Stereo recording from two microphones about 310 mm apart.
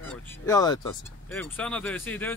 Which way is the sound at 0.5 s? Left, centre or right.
Centre.